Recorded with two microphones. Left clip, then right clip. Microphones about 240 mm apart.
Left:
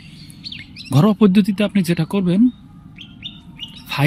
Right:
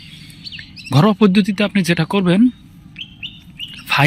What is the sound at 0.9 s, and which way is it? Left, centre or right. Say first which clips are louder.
Speech: right 2 dB; centre.